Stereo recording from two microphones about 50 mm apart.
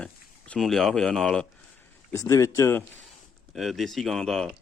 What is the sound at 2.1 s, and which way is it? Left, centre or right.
Speech, left.